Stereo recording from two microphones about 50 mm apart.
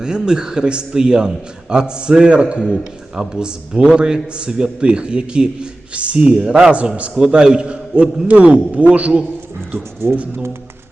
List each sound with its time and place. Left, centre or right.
0.0 s a man's voice: centre
9.7 s speech: right